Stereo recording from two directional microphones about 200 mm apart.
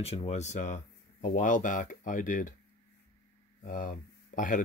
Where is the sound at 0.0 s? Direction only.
30° left (ahead or behind).